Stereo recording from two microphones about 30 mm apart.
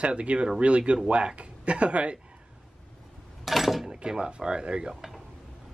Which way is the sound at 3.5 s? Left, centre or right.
Centre.